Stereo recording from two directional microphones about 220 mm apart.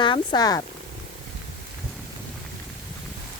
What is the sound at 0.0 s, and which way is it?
Speech, 20° left (ahead or behind).